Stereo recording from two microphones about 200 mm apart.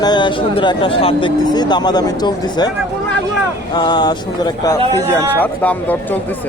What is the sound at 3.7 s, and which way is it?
Speech, 20° left (ahead or behind).